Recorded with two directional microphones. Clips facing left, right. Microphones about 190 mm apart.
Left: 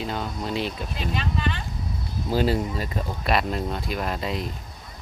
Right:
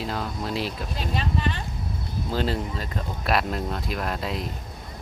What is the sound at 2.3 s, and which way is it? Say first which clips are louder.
Speech: left 4 dB; 10° left (ahead or behind).